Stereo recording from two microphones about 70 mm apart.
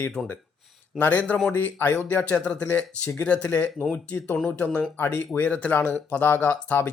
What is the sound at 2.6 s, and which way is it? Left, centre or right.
Speech, left.